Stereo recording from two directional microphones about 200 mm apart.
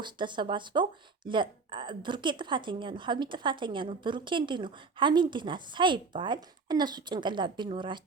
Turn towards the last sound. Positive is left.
turn(degrees=-25)  # may be behind; listen again after turning